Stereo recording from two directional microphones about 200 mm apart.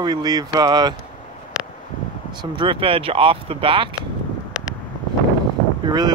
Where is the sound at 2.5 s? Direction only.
25° right (ahead or behind).